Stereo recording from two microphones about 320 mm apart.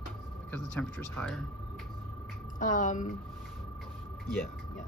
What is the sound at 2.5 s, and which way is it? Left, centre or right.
Speech, left.